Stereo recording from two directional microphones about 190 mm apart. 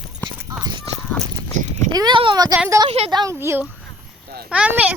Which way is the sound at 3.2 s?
15° right (ahead or behind).